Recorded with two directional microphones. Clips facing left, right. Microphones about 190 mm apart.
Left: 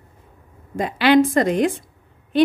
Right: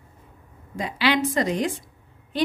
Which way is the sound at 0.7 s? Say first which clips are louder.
Left 8 dB; 50° left (ahead or behind).